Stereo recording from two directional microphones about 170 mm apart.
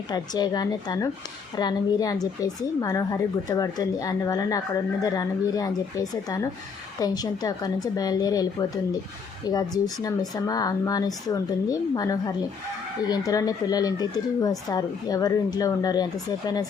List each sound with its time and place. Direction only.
0.1 s speech: 25° left (ahead or behind)